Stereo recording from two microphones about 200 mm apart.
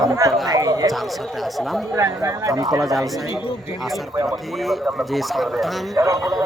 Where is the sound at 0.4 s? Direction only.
20° right (ahead or behind).